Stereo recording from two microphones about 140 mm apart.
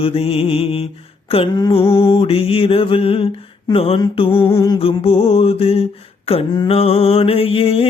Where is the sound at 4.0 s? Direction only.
40° left (ahead or behind).